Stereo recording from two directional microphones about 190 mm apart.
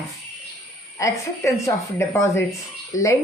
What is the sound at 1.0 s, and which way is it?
A woman's voice, 15° left (ahead or behind).